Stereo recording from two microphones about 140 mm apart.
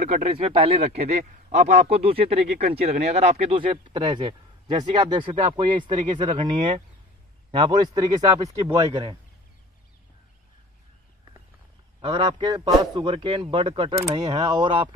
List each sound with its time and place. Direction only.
0.0 s speech: 65° right (ahead or behind)
0.3 s a man's voice: 45° right (ahead or behind)
12.0 s a man's voice: 35° right (ahead or behind)